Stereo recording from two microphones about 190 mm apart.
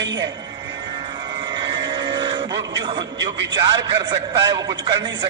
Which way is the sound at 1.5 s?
25° right (ahead or behind).